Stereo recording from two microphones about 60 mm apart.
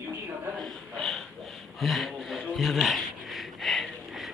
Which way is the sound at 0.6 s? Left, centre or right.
Centre.